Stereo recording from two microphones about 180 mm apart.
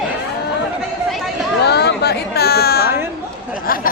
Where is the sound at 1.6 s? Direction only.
65° left (ahead or behind).